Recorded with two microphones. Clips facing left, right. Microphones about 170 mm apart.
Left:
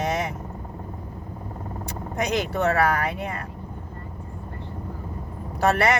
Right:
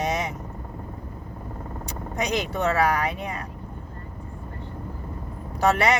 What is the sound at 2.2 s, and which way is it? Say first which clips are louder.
Speech: left 2 dB; 15° right (ahead or behind).